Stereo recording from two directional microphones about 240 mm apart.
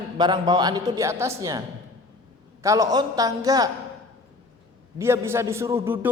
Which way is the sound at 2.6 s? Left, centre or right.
Centre.